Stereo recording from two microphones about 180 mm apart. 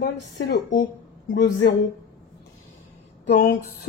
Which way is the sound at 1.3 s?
85° left.